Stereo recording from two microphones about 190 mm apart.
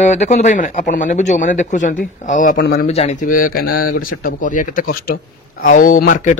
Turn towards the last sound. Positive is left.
turn(degrees=45)  # may be behind; listen again after turning